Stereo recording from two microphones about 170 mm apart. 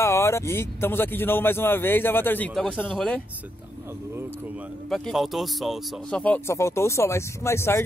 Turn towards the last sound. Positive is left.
turn(degrees=15)  # may be behind; listen again after turning